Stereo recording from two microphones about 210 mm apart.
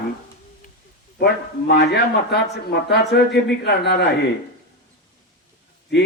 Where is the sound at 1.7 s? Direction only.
50° left (ahead or behind).